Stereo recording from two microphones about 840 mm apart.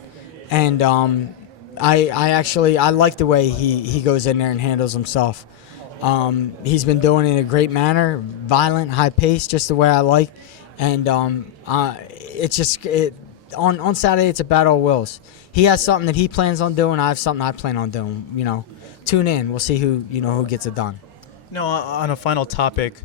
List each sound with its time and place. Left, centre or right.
0.5 s a man's voice: left